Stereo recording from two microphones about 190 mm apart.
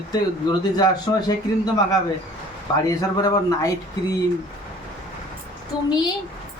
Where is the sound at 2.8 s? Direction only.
20° left (ahead or behind).